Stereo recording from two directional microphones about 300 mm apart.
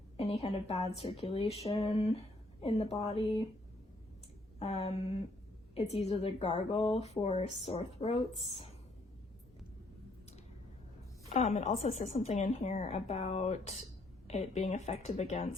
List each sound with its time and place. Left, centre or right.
0.2 s speech: centre
4.6 s speech: left
11.3 s speech: left